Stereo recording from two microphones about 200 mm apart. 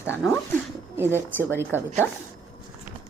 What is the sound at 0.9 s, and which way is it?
Speech, 10° right (ahead or behind).